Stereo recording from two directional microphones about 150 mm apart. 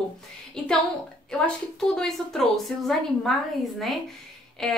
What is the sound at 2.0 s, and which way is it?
A woman's voice, 5° left (ahead or behind).